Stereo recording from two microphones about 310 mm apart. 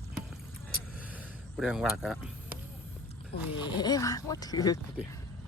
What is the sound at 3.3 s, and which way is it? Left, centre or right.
Speech, left.